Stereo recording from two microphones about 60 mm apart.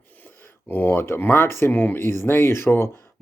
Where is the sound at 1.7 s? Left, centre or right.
Left.